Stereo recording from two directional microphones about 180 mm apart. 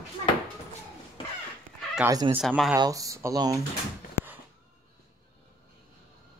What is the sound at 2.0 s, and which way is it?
Speech, 25° right (ahead or behind).